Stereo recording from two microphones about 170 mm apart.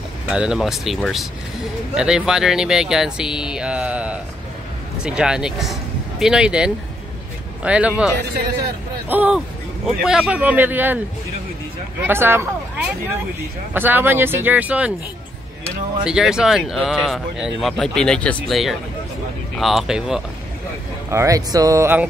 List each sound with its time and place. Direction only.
0.3 s speech: 5° right (ahead or behind)
9.1 s speech: 10° right (ahead or behind)
12.0 s speech: 15° right (ahead or behind)
16.0 s speech: 5° right (ahead or behind)
21.1 s speech: 20° right (ahead or behind)